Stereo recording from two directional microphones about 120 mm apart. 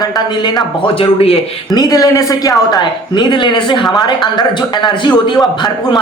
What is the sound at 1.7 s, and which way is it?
A woman's voice, 30° left (ahead or behind).